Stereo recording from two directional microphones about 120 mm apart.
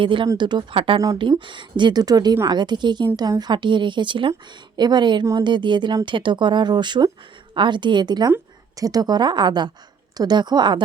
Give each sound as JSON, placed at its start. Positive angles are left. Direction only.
{"t": 0.0, "sound": "a woman's voice", "side_deg": -45}